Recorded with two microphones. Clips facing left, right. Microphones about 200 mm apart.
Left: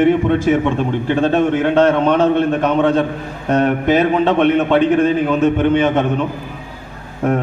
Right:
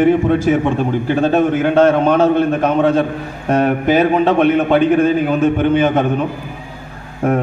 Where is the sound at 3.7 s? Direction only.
45° right (ahead or behind).